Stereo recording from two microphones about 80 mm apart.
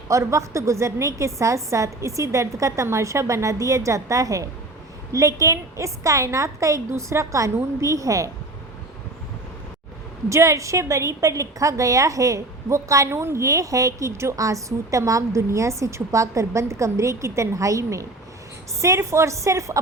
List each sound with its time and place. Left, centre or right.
0.1 s a woman's voice: right
10.2 s a woman's voice: right